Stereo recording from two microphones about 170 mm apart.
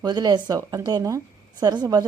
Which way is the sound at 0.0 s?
25° right (ahead or behind).